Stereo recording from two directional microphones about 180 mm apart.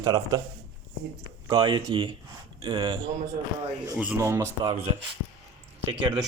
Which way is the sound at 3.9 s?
10° right (ahead or behind).